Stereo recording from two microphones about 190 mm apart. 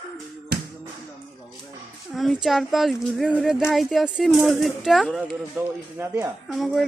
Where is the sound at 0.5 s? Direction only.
60° right (ahead or behind).